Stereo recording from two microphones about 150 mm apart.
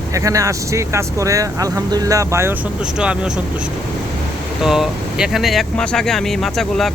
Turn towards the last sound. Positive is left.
turn(degrees=0)  # may be behind; listen again after turning